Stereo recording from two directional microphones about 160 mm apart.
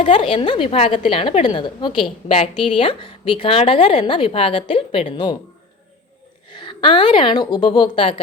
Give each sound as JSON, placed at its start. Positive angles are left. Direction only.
{"t": 0.0, "sound": "a woman's voice", "side_deg": 35}
{"t": 6.5, "sound": "a woman's voice", "side_deg": 30}